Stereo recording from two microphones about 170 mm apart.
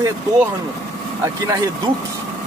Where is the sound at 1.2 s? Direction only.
20° right (ahead or behind).